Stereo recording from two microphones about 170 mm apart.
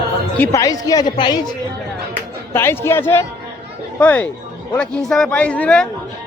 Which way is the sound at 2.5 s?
15° left (ahead or behind).